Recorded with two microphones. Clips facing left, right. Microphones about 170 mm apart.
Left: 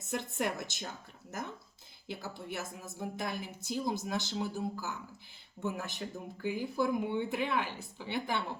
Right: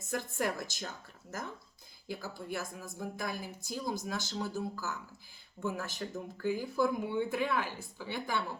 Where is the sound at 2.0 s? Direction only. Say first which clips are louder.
Right 1 dB; 20° left (ahead or behind).